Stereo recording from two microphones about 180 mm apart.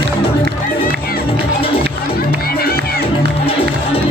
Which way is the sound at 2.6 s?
55° left (ahead or behind).